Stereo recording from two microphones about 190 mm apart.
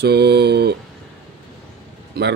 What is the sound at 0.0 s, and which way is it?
Mantra, 60° right (ahead or behind).